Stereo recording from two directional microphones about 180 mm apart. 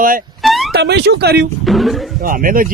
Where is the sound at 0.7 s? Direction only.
65° right (ahead or behind).